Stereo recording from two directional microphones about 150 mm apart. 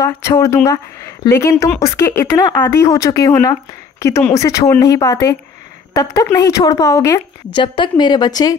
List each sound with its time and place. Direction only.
0.0 s a woman's voice: 20° left (ahead or behind)